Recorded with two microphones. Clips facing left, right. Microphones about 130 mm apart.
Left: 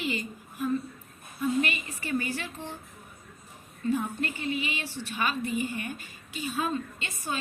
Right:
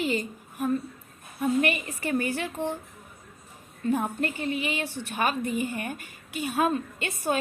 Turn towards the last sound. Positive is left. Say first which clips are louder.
# right 7 dB
turn(degrees=-55)  # may be behind; listen again after turning